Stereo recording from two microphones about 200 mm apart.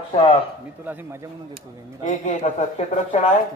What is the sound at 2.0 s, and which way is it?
A man's voice, 35° left (ahead or behind).